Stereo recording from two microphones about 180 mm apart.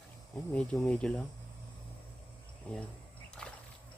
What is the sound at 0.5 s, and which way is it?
Speech, 5° left (ahead or behind).